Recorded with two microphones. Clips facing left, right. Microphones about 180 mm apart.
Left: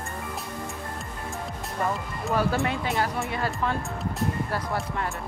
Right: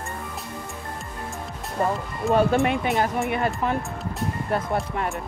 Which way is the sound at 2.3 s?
20° right (ahead or behind).